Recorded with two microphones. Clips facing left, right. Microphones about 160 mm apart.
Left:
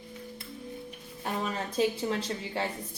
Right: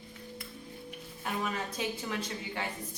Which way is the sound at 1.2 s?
30° left (ahead or behind).